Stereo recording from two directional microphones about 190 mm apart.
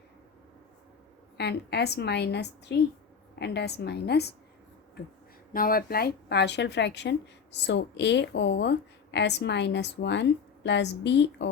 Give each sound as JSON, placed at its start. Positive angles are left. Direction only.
{"t": 1.4, "sound": "speech", "side_deg": 60}
{"t": 5.5, "sound": "speech", "side_deg": 50}